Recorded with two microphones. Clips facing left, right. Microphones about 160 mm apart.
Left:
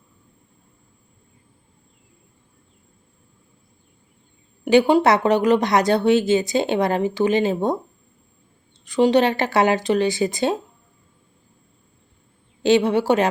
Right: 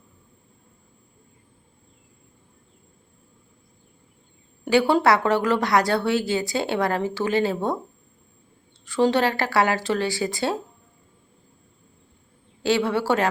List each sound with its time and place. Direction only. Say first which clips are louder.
4.6 s a woman's voice: left 4 dB; 20° left (ahead or behind)
8.8 s a woman's voice: left 4 dB; 15° left (ahead or behind)
12.6 s a woman's voice: left 5 dB; 20° left (ahead or behind)